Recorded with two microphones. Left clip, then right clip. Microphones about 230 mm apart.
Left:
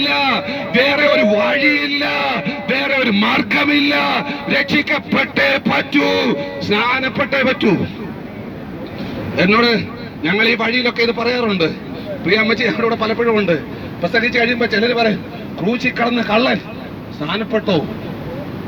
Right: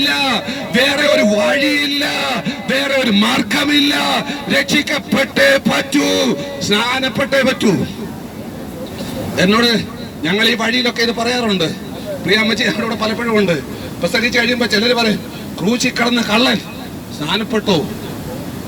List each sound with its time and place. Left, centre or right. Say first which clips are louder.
0.0 s a man's voice: even; right
9.3 s a man's voice: even; right